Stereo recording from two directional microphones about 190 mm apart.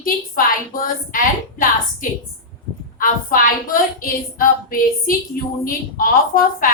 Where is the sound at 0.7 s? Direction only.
45° left (ahead or behind).